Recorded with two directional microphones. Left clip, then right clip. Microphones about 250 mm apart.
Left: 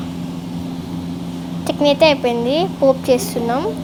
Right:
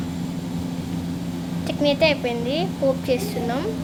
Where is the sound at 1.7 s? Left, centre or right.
Centre.